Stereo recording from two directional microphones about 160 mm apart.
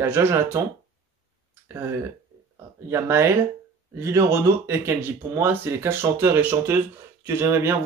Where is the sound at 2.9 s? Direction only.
15° right (ahead or behind).